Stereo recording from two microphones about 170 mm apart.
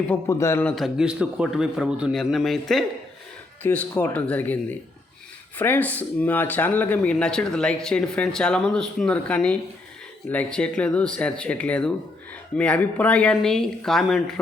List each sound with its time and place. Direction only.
0.1 s speech: 15° left (ahead or behind)
0.8 s a man's voice: 5° right (ahead or behind)